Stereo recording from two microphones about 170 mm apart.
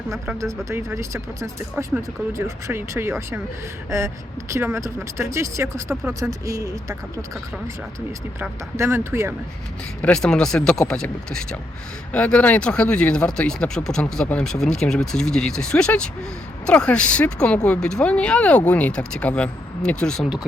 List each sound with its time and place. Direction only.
0.3 s speech: 15° right (ahead or behind)
8.4 s speech: 15° right (ahead or behind)
10.0 s speech: 5° left (ahead or behind)